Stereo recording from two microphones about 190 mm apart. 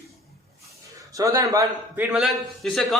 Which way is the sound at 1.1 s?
15° right (ahead or behind).